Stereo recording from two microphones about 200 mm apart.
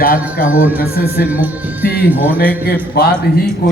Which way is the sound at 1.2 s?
10° right (ahead or behind).